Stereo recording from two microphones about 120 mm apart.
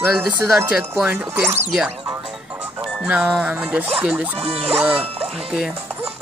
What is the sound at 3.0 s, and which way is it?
Speech, 10° right (ahead or behind).